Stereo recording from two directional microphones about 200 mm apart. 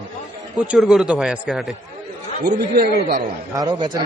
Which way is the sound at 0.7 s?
Centre (ahead or behind).